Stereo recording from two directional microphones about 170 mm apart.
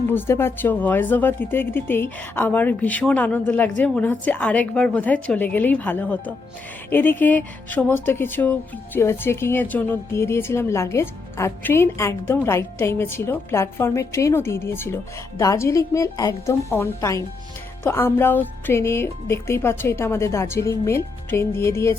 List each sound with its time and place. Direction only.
0.1 s speech: 15° left (ahead or behind)